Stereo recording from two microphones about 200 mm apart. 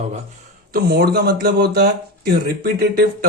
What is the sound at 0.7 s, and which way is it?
A man's voice, 50° right (ahead or behind).